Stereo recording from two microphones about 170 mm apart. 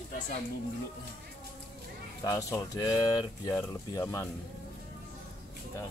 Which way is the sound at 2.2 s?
20° left (ahead or behind).